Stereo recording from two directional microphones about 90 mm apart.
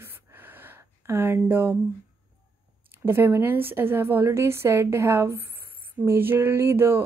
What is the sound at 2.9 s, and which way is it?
A woman's voice, 25° right (ahead or behind).